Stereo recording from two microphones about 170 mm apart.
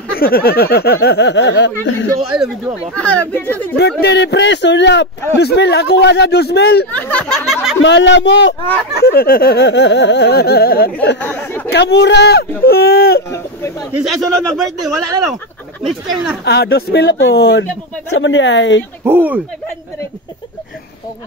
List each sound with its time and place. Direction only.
0.2 s speech: 65° left (ahead or behind); by 1.7 s 90° left
2.3 s speech: 5° right (ahead or behind)
2.9 s speech: 5° left (ahead or behind)
3.7 s speech: 75° left (ahead or behind)
5.4 s speech: 75° left (ahead or behind)
6.9 s a sound: 10° left (ahead or behind)
7.8 s speech: 90° left; by 10.9 s 65° left (ahead or behind)
11.1 s speech: 10° left (ahead or behind)
11.7 s speech: 85° left; by 13.2 s 70° left (ahead or behind)
13.3 s speech: 15° left (ahead or behind)
13.9 s speech: centre (ahead or behind)
16.4 s speech: 70° left (ahead or behind)
18.1 s speech: 90° left
19.0 s speech: 10° right (ahead or behind)